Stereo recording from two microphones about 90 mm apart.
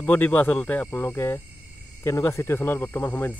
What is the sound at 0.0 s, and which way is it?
Speech, 20° left (ahead or behind).